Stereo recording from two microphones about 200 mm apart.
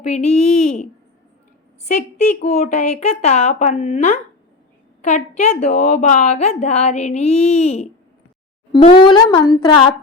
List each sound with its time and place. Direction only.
0.0 s a woman's voice: 35° left (ahead or behind)
1.9 s a woman's voice: 35° left (ahead or behind)